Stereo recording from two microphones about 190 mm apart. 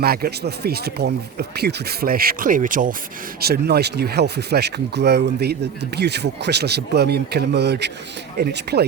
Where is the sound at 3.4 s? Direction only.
55° right (ahead or behind).